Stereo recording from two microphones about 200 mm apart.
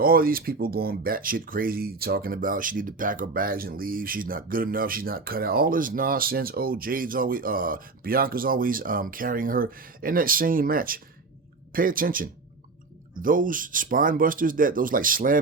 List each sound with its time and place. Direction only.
0.0 s speech: 45° right (ahead or behind)